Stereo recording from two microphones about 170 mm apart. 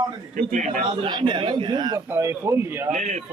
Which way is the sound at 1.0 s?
30° right (ahead or behind).